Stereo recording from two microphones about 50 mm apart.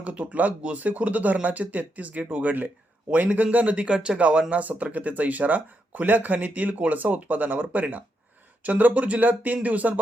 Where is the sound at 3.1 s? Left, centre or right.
Right.